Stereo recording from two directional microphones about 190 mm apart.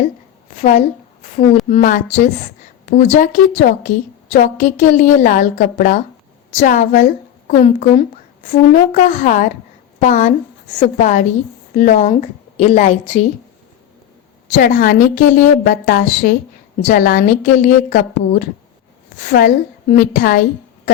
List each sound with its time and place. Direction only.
0.6 s a woman's voice: 40° left (ahead or behind)
14.5 s a woman's voice: 45° left (ahead or behind)